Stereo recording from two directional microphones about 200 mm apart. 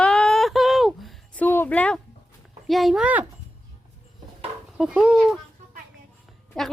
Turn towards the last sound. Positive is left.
turn(degrees=0)  # may be behind; listen again after turning